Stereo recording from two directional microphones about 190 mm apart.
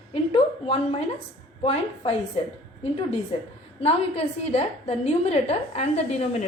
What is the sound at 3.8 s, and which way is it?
A woman's voice, 30° left (ahead or behind).